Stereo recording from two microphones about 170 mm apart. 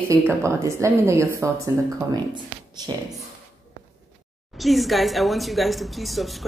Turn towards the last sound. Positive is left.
turn(degrees=0)  # may be behind; listen again after turning